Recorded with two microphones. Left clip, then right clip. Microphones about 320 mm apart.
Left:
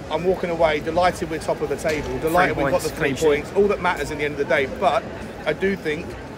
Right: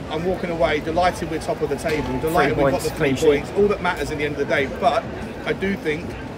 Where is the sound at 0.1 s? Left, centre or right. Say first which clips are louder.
Left 2 dB; centre.